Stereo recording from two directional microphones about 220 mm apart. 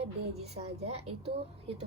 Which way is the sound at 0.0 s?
30° right (ahead or behind).